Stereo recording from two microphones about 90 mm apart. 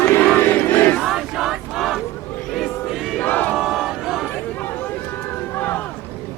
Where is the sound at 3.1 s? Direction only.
20° left (ahead or behind).